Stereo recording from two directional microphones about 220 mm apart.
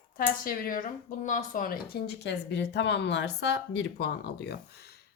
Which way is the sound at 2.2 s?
50° left (ahead or behind).